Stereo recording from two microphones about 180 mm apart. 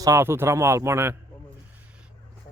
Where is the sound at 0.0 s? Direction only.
15° right (ahead or behind).